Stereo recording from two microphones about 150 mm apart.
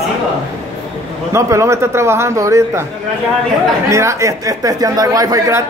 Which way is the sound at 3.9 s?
20° right (ahead or behind).